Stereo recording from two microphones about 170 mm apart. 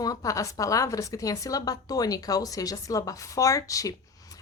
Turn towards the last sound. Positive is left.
turn(degrees=20)  # may be behind; listen again after turning